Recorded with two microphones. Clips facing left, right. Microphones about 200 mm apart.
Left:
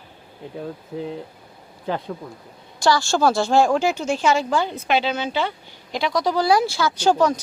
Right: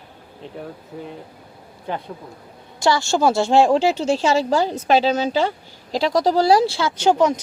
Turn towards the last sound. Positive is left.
turn(degrees=-20)  # may be behind; listen again after turning